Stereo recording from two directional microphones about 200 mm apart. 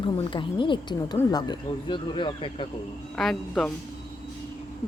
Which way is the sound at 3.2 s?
Centre (ahead or behind).